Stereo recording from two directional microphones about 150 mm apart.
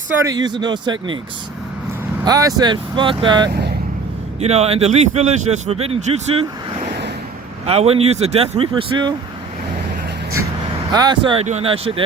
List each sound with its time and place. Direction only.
0.2 s speech: 25° right (ahead or behind)
2.2 s speech: 25° right (ahead or behind)
4.4 s speech: 45° right (ahead or behind)
7.6 s speech: 45° right (ahead or behind)
10.9 s speech: 30° right (ahead or behind)